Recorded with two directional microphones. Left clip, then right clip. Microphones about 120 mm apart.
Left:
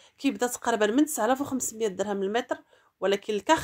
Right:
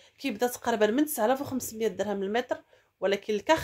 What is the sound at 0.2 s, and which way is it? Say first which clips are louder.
Speech: left 1 dB; 30° left (ahead or behind).